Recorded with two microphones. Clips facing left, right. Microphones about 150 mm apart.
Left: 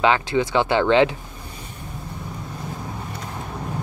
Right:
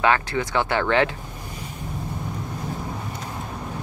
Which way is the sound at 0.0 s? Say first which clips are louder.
Left 2 dB; 20° left (ahead or behind).